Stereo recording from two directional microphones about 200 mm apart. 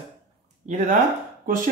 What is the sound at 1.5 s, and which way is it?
Speech, 45° right (ahead or behind).